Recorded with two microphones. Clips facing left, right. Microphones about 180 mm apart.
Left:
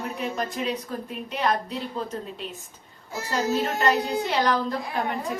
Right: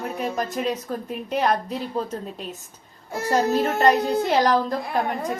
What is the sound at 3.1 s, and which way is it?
Speech, 55° right (ahead or behind).